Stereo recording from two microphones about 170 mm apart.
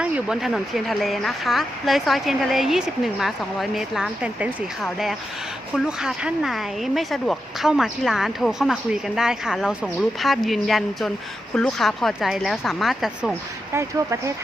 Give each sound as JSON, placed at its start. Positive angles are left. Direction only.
{"t": 0.0, "sound": "speech", "side_deg": -5}
{"t": 13.7, "sound": "speech", "side_deg": -20}